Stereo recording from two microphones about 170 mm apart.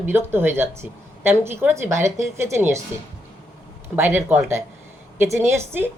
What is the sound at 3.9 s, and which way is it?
Speech, 15° right (ahead or behind).